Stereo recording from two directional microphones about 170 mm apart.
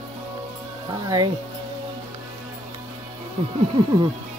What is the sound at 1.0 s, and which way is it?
Speech, 20° right (ahead or behind).